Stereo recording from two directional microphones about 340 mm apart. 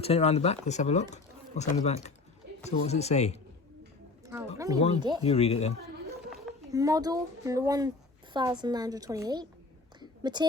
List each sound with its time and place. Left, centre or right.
0.0 s speech: centre
4.5 s speech: centre
5.2 s speech: centre
6.3 s a child's voice: centre
10.0 s a sound: centre